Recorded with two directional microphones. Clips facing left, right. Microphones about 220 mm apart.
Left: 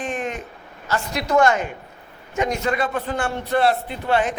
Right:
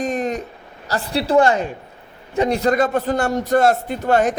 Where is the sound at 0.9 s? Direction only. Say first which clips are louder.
Right 3 dB; 35° right (ahead or behind).